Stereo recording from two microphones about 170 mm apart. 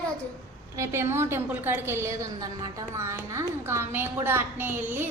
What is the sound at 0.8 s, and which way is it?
A woman's voice, 15° right (ahead or behind).